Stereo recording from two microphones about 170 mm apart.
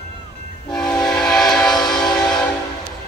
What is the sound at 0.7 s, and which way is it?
Train, 5° left (ahead or behind).